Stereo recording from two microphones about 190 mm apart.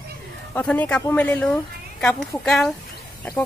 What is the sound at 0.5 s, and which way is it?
Speech, 10° left (ahead or behind).